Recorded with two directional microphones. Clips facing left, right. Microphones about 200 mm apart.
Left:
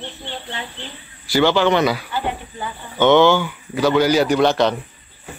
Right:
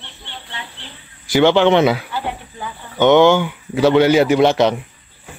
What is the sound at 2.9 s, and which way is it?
Speech, 15° right (ahead or behind).